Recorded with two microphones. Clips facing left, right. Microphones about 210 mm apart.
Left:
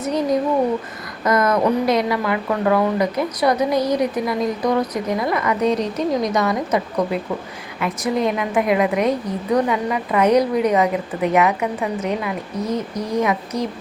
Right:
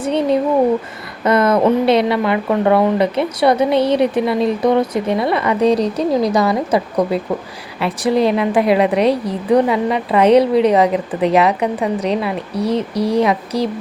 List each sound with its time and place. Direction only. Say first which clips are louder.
0.0 s a woman's voice: right 3 dB; 30° right (ahead or behind)